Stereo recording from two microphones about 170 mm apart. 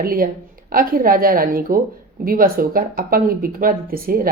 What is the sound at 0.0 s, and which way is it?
A woman's voice, 60° right (ahead or behind).